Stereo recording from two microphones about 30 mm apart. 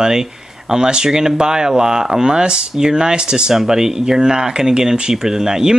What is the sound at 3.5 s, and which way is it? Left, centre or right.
Speech, centre.